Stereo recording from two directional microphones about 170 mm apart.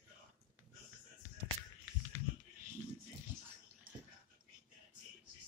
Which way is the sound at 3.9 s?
55° right (ahead or behind).